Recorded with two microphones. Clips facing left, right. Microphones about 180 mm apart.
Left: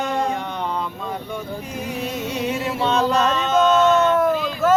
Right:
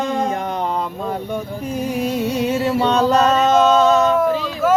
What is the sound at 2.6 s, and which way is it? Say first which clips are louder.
Music: right 3 dB; 35° right (ahead or behind).